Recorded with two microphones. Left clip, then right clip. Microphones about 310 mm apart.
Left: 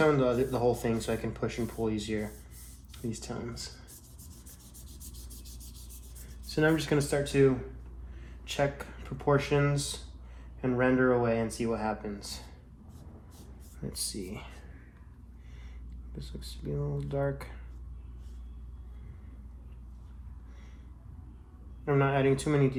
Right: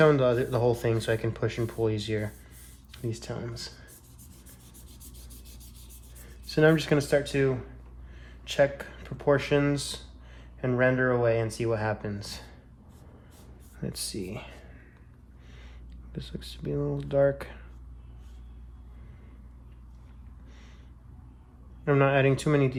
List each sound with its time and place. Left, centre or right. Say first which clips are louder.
0.0 s speech: right 4 dB; right
6.5 s speech: right 5 dB; right
13.8 s speech: right 3 dB; right
16.1 s speech: right 5 dB; right
21.8 s speech: right 4 dB; right